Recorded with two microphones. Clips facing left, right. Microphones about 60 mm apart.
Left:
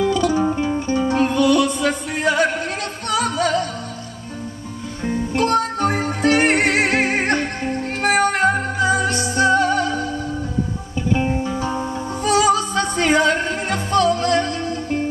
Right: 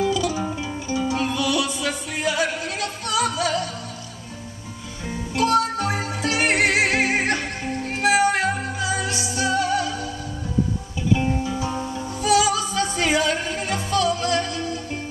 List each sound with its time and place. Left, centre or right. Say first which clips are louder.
0.0 s music: left 5 dB; left
5.0 s music: left 3 dB; left
11.1 s music: left 2 dB; left
12.2 s music: left 3 dB; left